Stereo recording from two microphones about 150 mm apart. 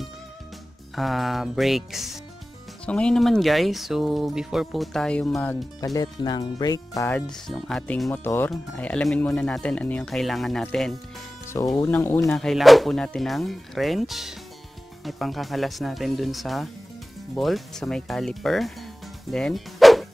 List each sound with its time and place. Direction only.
0.9 s speech: centre (ahead or behind)
5.9 s speech: 25° left (ahead or behind)
7.1 s speech: 5° left (ahead or behind)
8.1 s speech: 15° left (ahead or behind)
11.6 s speech: 20° left (ahead or behind)
12.4 s speech: centre (ahead or behind)
19.3 s music: centre (ahead or behind)